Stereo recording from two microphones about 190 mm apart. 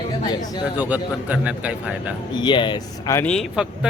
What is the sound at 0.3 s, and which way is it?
Speech, 20° left (ahead or behind).